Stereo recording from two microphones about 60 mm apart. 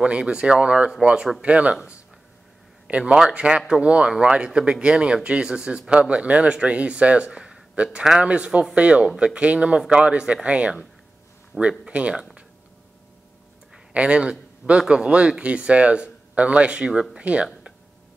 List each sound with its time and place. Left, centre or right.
0.0 s a man's voice: centre
13.9 s speech: centre